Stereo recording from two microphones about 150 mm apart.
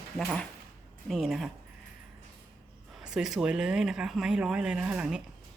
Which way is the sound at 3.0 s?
5° right (ahead or behind).